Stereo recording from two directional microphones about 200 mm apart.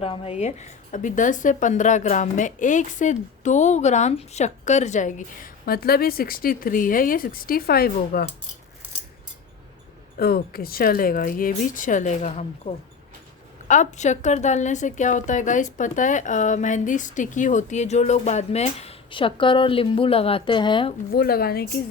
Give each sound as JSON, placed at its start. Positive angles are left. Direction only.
{"t": 0.0, "sound": "a woman's voice", "side_deg": 30}
{"t": 10.2, "sound": "a woman's voice", "side_deg": 50}
{"t": 21.2, "sound": "speech", "side_deg": 50}